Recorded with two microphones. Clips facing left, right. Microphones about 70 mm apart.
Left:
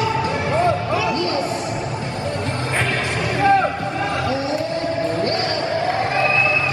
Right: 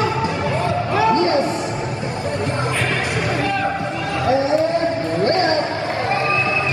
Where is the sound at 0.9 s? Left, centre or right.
Right.